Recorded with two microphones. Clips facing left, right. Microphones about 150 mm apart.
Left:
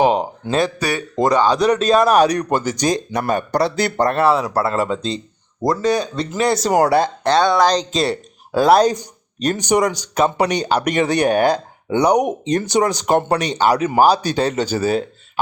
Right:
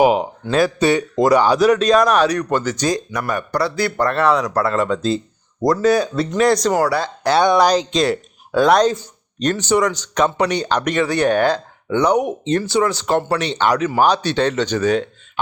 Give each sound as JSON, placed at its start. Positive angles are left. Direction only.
{"t": 0.0, "sound": "speech", "side_deg": -5}
{"t": 0.8, "sound": "speech", "side_deg": -25}
{"t": 1.3, "sound": "speech", "side_deg": -10}
{"t": 3.1, "sound": "speech", "side_deg": 25}
{"t": 6.7, "sound": "speech", "side_deg": 20}
{"t": 7.3, "sound": "speech", "side_deg": -15}
{"t": 7.9, "sound": "speech", "side_deg": 0}